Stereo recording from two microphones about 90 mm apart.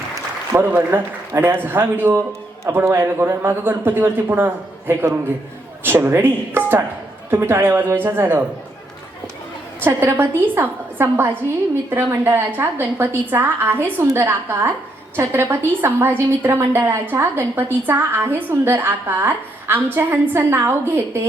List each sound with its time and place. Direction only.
0.5 s a woman's voice: 25° right (ahead or behind)
9.8 s a woman's voice: 25° right (ahead or behind)